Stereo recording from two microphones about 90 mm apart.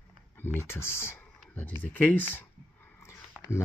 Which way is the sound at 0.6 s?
30° left (ahead or behind).